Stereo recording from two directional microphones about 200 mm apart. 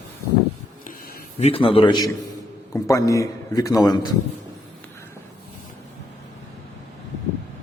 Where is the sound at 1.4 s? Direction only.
25° left (ahead or behind).